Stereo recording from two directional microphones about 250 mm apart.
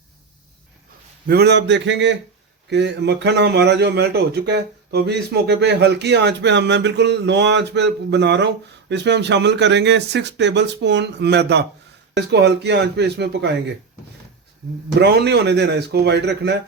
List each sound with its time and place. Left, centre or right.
1.3 s speech: right
14.9 s speech: right